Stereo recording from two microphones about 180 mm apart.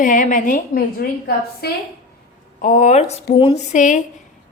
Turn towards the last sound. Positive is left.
turn(degrees=40)  # may be behind; listen again after turning